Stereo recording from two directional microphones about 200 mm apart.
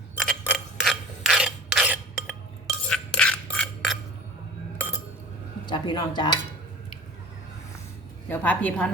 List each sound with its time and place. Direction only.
0.2 s mechanisms: 5° left (ahead or behind)
2.9 s coin: 5° left (ahead or behind)
5.6 s dishes: 20° left (ahead or behind)
8.3 s a woman's voice: 10° left (ahead or behind)